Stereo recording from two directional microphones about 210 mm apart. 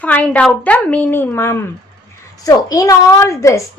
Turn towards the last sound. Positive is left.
turn(degrees=15)  # may be behind; listen again after turning